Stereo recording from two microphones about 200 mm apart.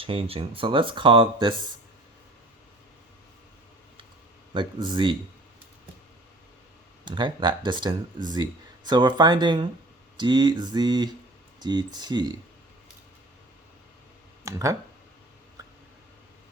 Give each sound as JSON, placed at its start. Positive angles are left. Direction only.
{"t": 0.0, "sound": "speech", "side_deg": -25}
{"t": 4.5, "sound": "speech", "side_deg": -25}
{"t": 7.0, "sound": "speech", "side_deg": -25}
{"t": 14.4, "sound": "speech", "side_deg": -15}